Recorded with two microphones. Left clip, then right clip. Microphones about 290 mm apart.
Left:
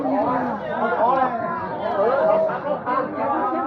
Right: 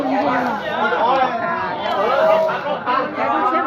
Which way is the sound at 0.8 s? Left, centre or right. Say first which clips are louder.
Right 2 dB; right.